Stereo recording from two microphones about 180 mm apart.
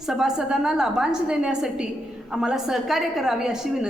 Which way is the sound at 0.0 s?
5° right (ahead or behind).